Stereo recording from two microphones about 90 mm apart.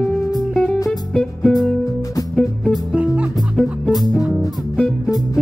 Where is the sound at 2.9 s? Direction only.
15° right (ahead or behind).